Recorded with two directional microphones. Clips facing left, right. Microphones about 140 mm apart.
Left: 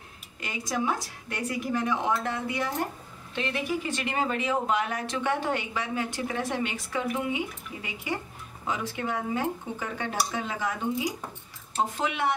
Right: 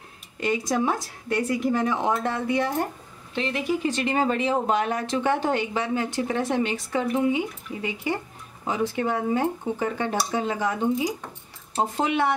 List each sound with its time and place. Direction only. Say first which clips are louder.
0.4 s speech: right 7 dB; 30° right (ahead or behind)